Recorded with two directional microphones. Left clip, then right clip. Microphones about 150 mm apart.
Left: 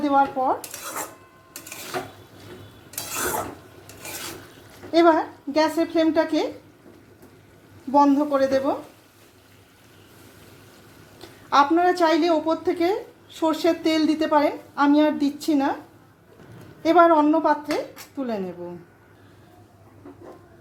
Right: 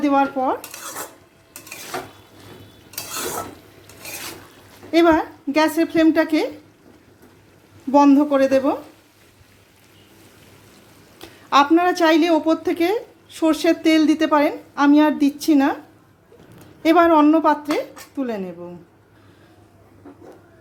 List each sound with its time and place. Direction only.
0.0 s cutlery: 40° right (ahead or behind)
4.9 s a woman's voice: 35° right (ahead or behind)
7.9 s a woman's voice: 40° right (ahead or behind)
11.2 s a woman's voice: 35° right (ahead or behind)
16.8 s a woman's voice: 35° right (ahead or behind)
18.2 s speech: 20° right (ahead or behind)